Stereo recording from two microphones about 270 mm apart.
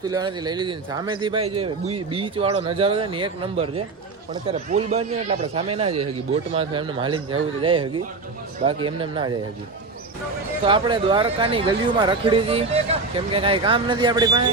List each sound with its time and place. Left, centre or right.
0.0 s speech: centre
10.6 s speech: centre